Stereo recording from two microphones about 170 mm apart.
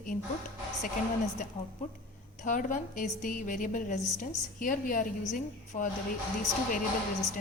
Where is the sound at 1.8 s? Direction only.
50° left (ahead or behind).